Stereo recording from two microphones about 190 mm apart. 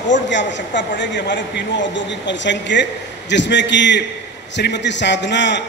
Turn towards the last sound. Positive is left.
turn(degrees=70)  # may be behind; listen again after turning